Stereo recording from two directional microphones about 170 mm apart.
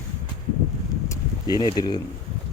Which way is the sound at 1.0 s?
20° left (ahead or behind).